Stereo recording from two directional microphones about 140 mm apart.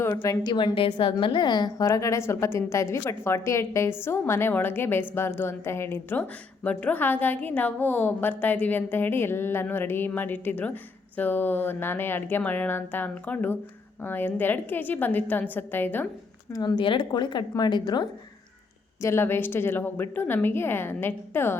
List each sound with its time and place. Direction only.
0.1 s a woman's voice: 25° left (ahead or behind)
16.5 s speech: 30° left (ahead or behind)
19.0 s a woman's voice: 15° left (ahead or behind)